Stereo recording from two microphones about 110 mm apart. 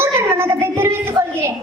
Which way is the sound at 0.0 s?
20° right (ahead or behind).